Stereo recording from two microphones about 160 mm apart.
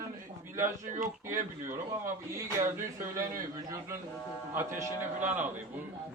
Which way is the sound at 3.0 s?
60° right (ahead or behind).